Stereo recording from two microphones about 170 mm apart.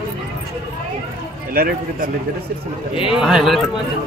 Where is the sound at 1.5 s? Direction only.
60° right (ahead or behind).